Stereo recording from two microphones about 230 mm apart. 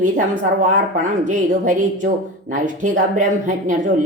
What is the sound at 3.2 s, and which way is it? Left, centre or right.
Speech, right.